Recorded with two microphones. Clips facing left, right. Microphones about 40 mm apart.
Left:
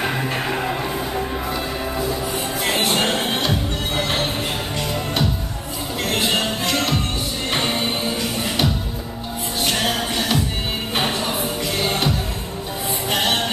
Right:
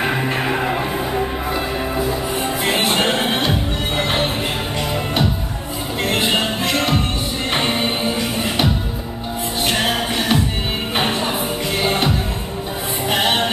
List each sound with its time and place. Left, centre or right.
0.0 s music: centre
6.0 s music: centre
11.8 s music: centre